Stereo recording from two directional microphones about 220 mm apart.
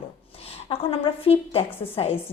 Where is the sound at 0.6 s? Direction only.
25° left (ahead or behind).